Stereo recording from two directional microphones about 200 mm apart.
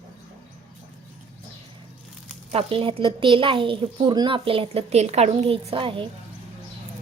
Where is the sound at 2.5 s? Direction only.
30° right (ahead or behind).